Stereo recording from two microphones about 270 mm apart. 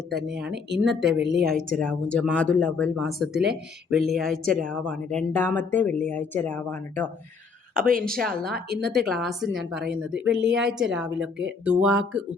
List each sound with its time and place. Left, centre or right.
0.1 s speech: centre
1.2 s a woman's voice: right
1.5 s speech: centre
7.7 s a woman's voice: right
9.0 s speech: centre